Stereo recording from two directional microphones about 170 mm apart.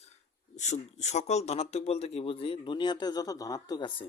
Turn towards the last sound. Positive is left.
turn(degrees=25)  # may be behind; listen again after turning